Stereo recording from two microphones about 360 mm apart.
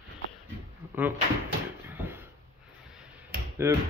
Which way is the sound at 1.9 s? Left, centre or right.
Centre.